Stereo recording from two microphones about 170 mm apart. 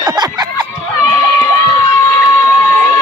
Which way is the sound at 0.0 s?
25° right (ahead or behind).